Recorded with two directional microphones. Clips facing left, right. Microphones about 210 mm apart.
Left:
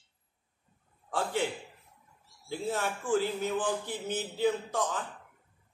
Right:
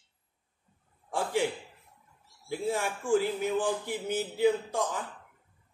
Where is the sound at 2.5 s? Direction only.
10° right (ahead or behind).